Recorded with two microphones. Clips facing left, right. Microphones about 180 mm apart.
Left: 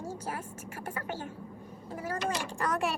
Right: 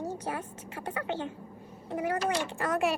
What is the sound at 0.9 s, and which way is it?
Speech, 20° right (ahead or behind).